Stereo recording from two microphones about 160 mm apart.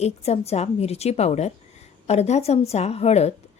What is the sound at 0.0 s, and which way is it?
A woman's voice, 40° left (ahead or behind).